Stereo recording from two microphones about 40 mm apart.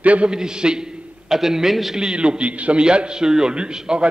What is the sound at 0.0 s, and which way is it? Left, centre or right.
Speech, right.